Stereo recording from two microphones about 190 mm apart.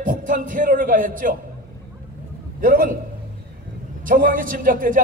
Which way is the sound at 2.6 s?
45° right (ahead or behind).